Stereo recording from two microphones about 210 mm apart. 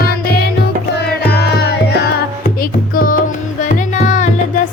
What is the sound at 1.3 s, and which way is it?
Music, 50° left (ahead or behind).